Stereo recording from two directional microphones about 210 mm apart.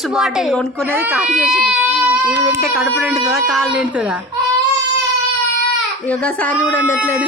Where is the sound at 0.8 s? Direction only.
10° right (ahead or behind).